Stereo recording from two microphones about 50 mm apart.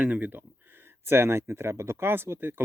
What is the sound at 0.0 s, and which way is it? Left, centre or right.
Speech, right.